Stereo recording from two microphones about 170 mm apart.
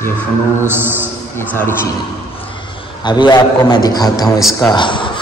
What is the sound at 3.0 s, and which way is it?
A man's voice, 25° left (ahead or behind).